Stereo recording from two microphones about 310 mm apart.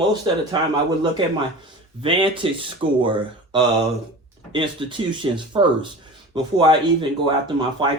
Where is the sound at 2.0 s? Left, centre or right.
Centre.